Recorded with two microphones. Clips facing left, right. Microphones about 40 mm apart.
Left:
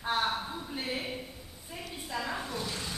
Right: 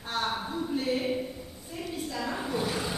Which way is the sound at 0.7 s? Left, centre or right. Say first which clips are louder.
Right 7 dB; centre.